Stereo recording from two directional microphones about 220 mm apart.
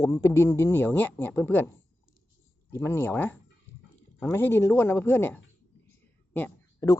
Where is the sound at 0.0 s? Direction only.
15° left (ahead or behind).